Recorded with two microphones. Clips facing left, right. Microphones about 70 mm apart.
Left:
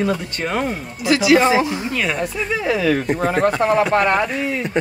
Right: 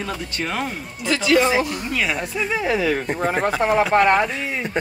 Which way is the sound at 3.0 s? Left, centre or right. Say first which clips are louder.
Left 4 dB; centre.